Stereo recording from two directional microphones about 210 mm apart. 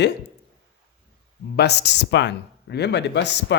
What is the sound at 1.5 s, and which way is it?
Speech, 50° left (ahead or behind).